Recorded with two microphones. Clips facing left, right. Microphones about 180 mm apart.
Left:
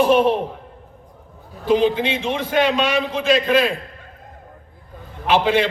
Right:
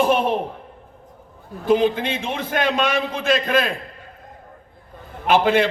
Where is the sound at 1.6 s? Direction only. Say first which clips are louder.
Left 1 dB; 50° right (ahead or behind).